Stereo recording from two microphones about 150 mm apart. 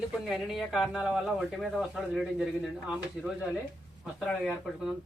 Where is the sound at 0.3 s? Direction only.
Centre (ahead or behind).